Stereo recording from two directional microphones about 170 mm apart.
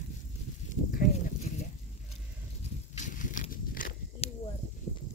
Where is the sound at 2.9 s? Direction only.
50° left (ahead or behind).